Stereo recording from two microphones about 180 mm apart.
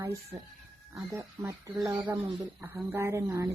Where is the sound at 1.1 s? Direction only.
15° right (ahead or behind).